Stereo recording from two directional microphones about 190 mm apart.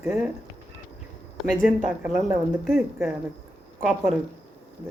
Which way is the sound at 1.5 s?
45° left (ahead or behind).